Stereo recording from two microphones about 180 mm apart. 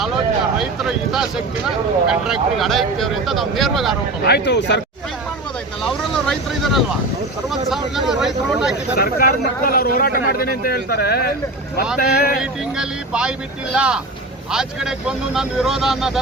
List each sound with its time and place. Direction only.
0.6 s speech: centre (ahead or behind)
4.3 s speech: 75° left (ahead or behind)
5.8 s vehicle: 5° left (ahead or behind)
7.7 s speech: centre (ahead or behind)
9.0 s speech: 60° left (ahead or behind)
12.4 s speech: 5° right (ahead or behind)